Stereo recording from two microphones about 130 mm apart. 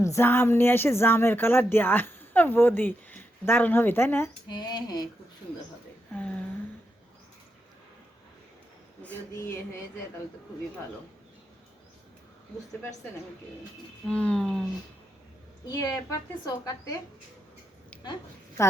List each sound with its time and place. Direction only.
0.0 s speech: 20° left (ahead or behind)
4.4 s a sound: 35° left (ahead or behind)
6.1 s a sound: 10° left (ahead or behind)
14.1 s speech: 10° left (ahead or behind)
15.7 s a woman's voice: 25° left (ahead or behind)
17.9 s dog: 10° left (ahead or behind)